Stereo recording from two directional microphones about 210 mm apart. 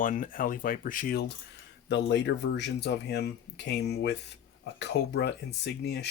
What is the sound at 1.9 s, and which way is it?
Speech, 55° left (ahead or behind).